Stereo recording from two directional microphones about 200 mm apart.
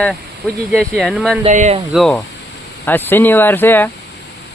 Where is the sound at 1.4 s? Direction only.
35° right (ahead or behind).